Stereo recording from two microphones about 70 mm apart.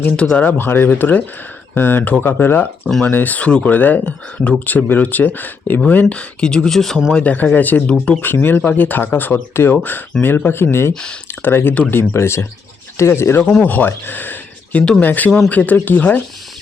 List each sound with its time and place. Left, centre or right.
0.2 s speech: centre
0.4 s speech: left
7.5 s speech: left
13.4 s speech: centre
13.7 s speech: left